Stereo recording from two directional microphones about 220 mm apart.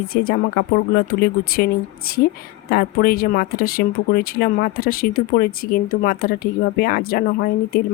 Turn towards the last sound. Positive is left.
turn(degrees=40)  # may be behind; listen again after turning